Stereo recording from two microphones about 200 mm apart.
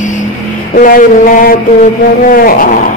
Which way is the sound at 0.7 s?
45° left (ahead or behind).